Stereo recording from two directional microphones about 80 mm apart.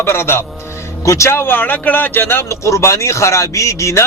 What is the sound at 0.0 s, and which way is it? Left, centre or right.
A man's voice, left.